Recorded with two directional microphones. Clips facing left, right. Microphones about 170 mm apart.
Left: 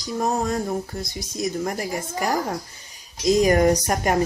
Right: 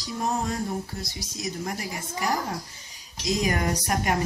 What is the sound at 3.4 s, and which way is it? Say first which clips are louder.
Speech: left 10 dB; 45° left (ahead or behind).